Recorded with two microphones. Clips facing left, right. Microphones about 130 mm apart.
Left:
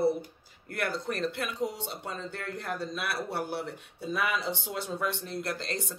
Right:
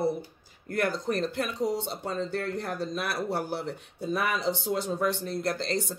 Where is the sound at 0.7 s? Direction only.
40° right (ahead or behind).